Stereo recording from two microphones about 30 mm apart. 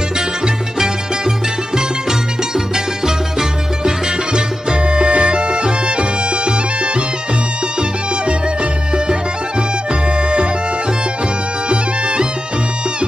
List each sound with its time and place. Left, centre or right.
1.8 s music: centre
3.8 s music: right
4.8 s music: right
10.1 s music: right
11.7 s music: right